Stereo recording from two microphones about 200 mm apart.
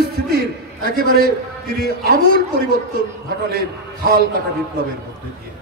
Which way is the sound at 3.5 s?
50° right (ahead or behind).